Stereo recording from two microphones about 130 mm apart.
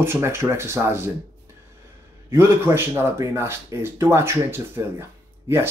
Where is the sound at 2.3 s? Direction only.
20° right (ahead or behind).